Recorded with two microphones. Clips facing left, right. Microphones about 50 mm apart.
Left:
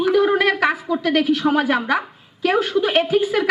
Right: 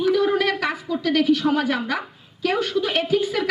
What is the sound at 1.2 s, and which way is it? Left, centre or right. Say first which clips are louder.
A woman's voice: even; centre.